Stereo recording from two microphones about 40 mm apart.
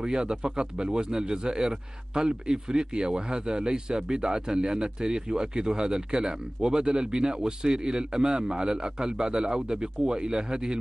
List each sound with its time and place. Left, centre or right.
0.0 s speech: centre